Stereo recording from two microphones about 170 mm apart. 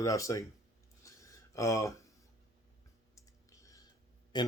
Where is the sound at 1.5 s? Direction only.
20° left (ahead or behind).